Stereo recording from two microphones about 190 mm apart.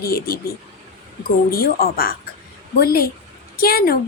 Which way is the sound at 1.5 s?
50° left (ahead or behind).